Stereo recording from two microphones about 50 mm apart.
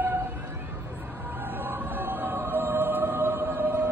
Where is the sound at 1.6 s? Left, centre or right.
Right.